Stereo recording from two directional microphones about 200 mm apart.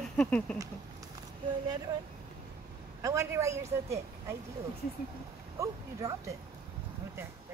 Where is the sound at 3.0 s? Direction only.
15° right (ahead or behind).